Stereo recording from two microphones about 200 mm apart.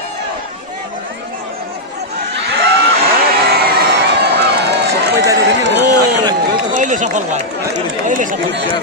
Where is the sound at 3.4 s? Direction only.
55° right (ahead or behind).